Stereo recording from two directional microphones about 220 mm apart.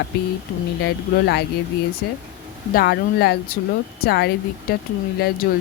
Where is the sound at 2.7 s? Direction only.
45° left (ahead or behind).